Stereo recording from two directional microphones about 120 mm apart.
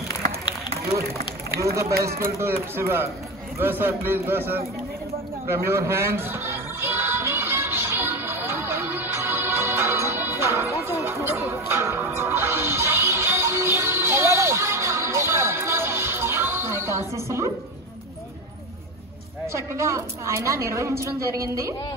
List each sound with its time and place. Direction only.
1.6 s a woman's voice: 25° right (ahead or behind)
5.5 s music: 20° right (ahead or behind)
19.4 s a woman's voice: 25° right (ahead or behind)